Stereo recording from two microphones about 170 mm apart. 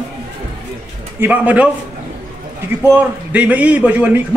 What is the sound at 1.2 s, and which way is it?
Speech, 10° right (ahead or behind).